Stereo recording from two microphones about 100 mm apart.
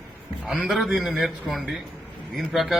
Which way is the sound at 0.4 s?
5° right (ahead or behind).